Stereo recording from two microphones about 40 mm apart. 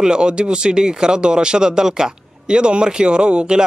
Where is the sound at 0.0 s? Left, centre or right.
Right.